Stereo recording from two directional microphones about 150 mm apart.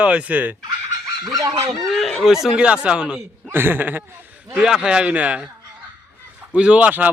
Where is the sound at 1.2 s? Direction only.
25° right (ahead or behind).